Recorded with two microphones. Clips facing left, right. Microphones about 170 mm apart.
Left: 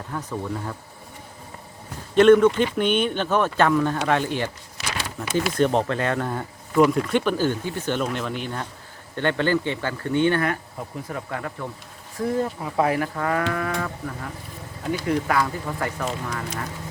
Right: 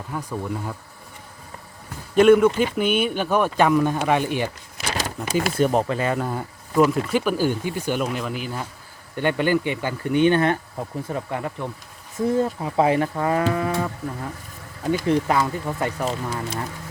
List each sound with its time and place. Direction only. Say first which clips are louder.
0.1 s speech: right 1 dB; 10° right (ahead or behind)
2.1 s speech: even; 10° right (ahead or behind)
4.9 s a sound: right 3 dB; 40° right (ahead or behind)
5.5 s speech: even; 5° right (ahead or behind)
15.0 s speech: right 1 dB; 25° right (ahead or behind)